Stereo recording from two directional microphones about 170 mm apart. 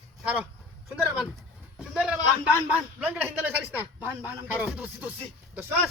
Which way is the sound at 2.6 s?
10° right (ahead or behind).